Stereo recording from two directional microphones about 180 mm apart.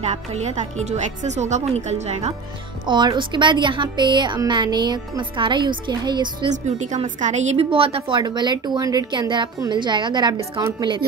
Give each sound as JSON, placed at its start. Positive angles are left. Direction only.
{"t": 0.0, "sound": "speech", "side_deg": -40}
{"t": 2.9, "sound": "a woman's voice", "side_deg": -25}
{"t": 6.5, "sound": "a woman's voice", "side_deg": -40}